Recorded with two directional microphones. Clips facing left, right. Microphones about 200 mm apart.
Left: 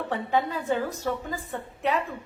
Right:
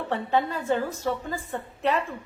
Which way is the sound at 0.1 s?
10° left (ahead or behind).